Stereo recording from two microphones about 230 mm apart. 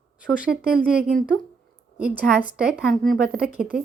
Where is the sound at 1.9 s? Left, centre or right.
Left.